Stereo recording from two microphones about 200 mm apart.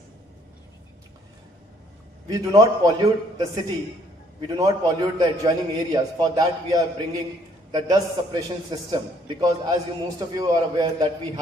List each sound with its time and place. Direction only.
2.2 s a man's voice: 15° right (ahead or behind)